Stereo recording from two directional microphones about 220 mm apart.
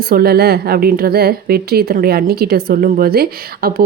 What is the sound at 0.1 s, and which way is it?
A woman's voice, 45° right (ahead or behind).